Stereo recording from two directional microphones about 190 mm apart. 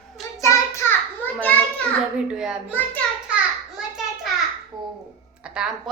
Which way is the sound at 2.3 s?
5° right (ahead or behind).